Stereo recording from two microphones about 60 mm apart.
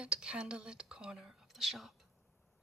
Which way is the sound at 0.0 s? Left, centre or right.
Centre.